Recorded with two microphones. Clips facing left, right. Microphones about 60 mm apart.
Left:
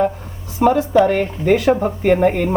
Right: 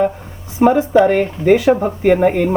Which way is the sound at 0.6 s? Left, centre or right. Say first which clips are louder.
Right 2 dB; right.